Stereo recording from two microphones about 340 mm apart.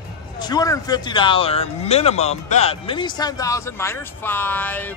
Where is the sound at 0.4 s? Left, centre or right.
Centre.